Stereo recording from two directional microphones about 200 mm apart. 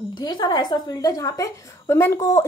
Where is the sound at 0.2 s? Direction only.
20° left (ahead or behind).